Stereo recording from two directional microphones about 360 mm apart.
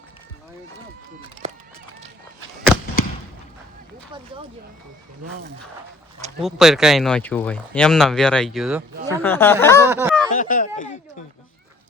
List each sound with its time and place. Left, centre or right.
6.4 s speech: centre
9.9 s a sound: centre
10.3 s speech: left